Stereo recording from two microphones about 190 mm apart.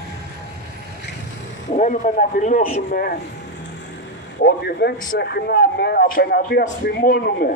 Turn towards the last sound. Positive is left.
turn(degrees=55)  # may be behind; listen again after turning